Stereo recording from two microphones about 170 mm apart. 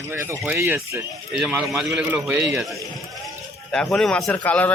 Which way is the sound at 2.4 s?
20° right (ahead or behind).